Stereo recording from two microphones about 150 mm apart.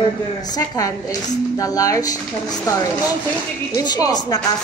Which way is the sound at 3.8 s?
25° left (ahead or behind).